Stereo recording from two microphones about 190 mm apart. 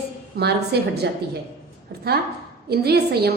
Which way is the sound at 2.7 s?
55° right (ahead or behind).